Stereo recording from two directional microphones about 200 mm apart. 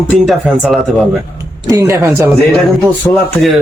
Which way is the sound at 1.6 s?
15° right (ahead or behind).